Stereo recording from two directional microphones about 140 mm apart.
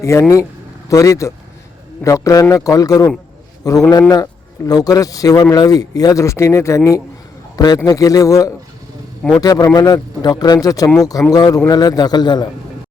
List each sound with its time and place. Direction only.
0.0 s a man's voice: 20° left (ahead or behind)